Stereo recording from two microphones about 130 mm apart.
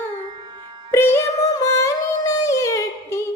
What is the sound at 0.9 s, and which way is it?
Music, 20° left (ahead or behind).